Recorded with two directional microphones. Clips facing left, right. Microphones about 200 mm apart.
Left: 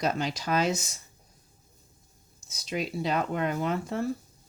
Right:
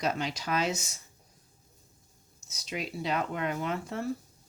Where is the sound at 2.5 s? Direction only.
35° left (ahead or behind).